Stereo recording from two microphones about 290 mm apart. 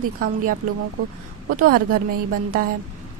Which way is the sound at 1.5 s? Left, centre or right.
Right.